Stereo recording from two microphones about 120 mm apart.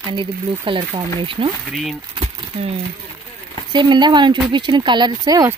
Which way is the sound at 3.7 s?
40° right (ahead or behind).